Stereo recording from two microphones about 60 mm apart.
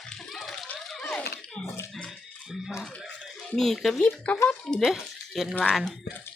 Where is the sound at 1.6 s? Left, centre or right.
Centre.